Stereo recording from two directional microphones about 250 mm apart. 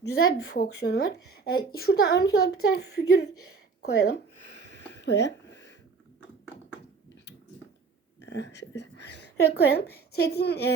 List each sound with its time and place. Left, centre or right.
0.5 s a woman's voice: left
3.8 s a sound: left
8.2 s a woman's voice: left